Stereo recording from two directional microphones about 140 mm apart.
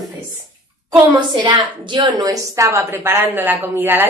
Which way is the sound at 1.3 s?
35° right (ahead or behind).